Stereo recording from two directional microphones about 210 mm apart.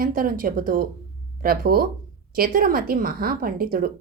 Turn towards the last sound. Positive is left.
turn(degrees=-45)  # may be behind; listen again after turning